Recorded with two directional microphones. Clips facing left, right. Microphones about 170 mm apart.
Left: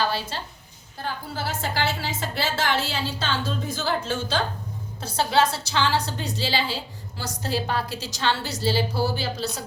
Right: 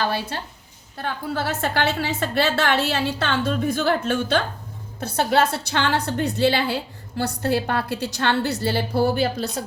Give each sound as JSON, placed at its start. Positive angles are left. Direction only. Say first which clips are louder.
{"t": 0.9, "sound": "a woman's voice", "louder": "right 5 dB", "side_deg": -65}